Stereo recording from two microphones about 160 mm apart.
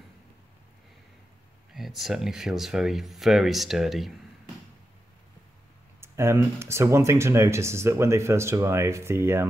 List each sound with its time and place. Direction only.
1.7 s speech: centre (ahead or behind)
5.9 s speech: 15° right (ahead or behind)